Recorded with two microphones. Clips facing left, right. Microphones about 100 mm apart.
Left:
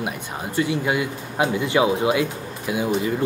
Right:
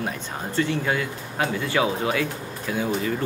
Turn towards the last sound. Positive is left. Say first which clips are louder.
# left 3 dB
turn(degrees=15)  # may be behind; listen again after turning